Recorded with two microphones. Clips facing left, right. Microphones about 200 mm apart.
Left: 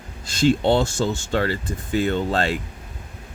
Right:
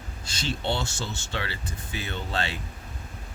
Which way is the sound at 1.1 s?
45° left (ahead or behind).